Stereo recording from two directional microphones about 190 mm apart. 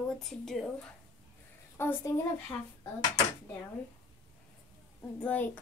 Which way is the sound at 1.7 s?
10° left (ahead or behind).